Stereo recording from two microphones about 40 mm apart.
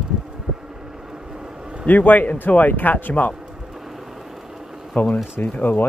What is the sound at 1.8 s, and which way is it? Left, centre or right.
Speech, left.